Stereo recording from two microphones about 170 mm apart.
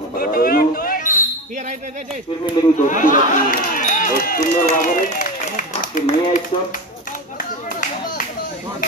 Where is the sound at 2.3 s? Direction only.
25° left (ahead or behind).